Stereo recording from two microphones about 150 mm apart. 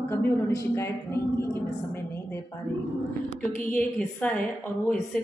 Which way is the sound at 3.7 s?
10° left (ahead or behind).